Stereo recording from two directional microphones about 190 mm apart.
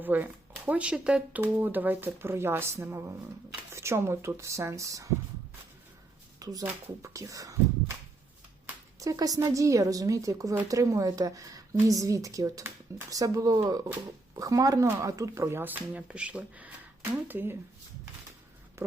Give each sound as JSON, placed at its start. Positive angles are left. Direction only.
{"t": 0.0, "sound": "a woman's voice", "side_deg": -10}
{"t": 6.4, "sound": "a woman's voice", "side_deg": -20}
{"t": 18.8, "sound": "a sound", "side_deg": -15}